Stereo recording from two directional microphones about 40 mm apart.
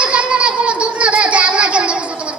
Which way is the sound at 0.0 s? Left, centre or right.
Right.